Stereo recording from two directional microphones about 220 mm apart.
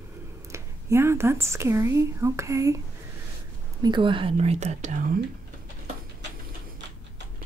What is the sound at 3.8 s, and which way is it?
Speech, 20° right (ahead or behind).